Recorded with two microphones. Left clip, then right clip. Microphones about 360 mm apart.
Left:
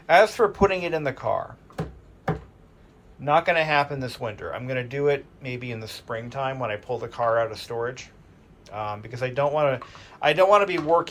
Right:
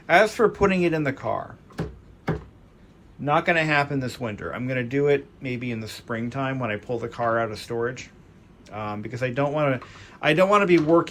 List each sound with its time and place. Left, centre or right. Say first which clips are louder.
0.1 s speech: left 1 dB; centre
3.2 s speech: left 1 dB; centre